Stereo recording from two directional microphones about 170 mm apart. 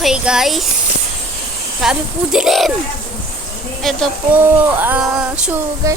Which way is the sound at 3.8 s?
Centre (ahead or behind).